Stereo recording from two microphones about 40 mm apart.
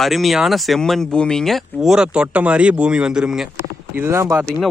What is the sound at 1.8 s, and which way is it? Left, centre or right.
Speech, centre.